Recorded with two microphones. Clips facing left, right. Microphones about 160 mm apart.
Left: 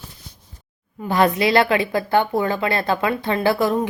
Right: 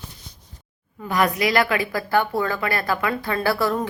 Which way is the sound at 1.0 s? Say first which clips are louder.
Left 3 dB; 30° left (ahead or behind).